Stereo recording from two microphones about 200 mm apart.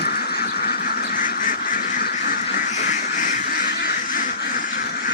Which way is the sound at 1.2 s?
40° left (ahead or behind).